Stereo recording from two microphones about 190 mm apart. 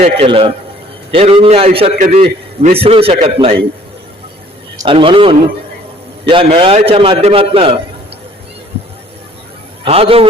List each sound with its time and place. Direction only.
0.0 s a man's voice: 30° right (ahead or behind)
4.9 s a man's voice: 25° right (ahead or behind)
9.8 s a man's voice: 30° right (ahead or behind)